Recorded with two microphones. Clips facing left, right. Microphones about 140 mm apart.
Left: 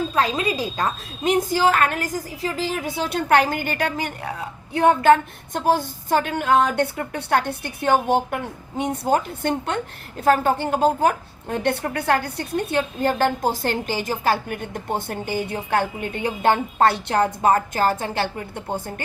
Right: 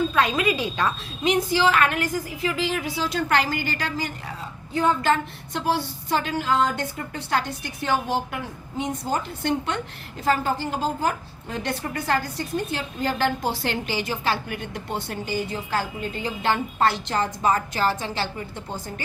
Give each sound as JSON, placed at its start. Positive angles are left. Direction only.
{"t": 0.1, "sound": "a woman's voice", "side_deg": 30}